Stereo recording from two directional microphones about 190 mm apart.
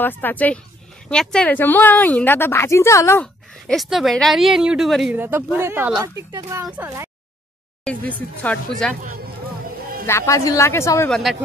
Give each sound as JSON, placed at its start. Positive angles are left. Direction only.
{"t": 0.0, "sound": "a woman's voice", "side_deg": 10}
{"t": 7.8, "sound": "speech", "side_deg": 5}
{"t": 9.0, "sound": "music", "side_deg": -50}
{"t": 10.0, "sound": "speech", "side_deg": 15}
{"t": 11.1, "sound": "a woman's voice", "side_deg": 0}